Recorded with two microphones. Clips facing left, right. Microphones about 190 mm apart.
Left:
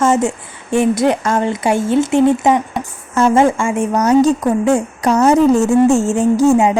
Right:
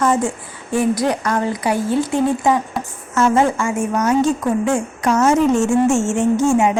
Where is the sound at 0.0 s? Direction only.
25° left (ahead or behind).